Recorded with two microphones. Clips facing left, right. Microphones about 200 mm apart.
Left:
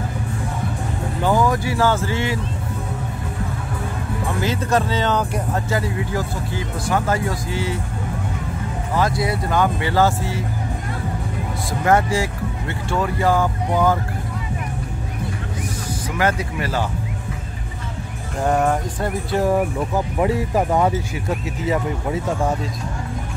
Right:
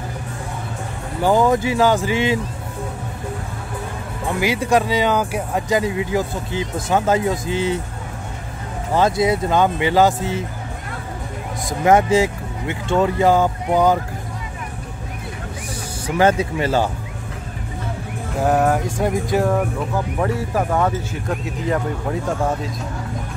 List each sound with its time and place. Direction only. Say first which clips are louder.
1.2 s speech: right 3 dB; 20° right (ahead or behind)
4.4 s speech: right 3 dB; 10° right (ahead or behind)
8.9 s speech: right 4 dB; 25° right (ahead or behind)
11.8 s speech: right 4 dB; 20° right (ahead or behind)
16.2 s speech: right 6 dB; 25° right (ahead or behind)
18.4 s speech: right 2 dB; 5° right (ahead or behind)
20.2 s speech: left 2 dB; 15° left (ahead or behind)